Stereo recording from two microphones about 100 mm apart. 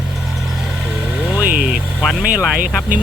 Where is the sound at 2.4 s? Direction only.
5° right (ahead or behind).